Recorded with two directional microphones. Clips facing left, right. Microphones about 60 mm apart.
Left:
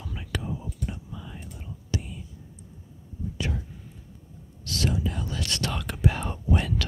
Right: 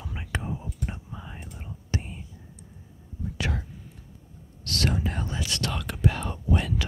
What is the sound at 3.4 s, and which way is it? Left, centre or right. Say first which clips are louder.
Whispering: right 1 dB; right.